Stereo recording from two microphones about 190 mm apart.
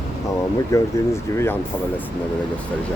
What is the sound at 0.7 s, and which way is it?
Speech, 15° left (ahead or behind).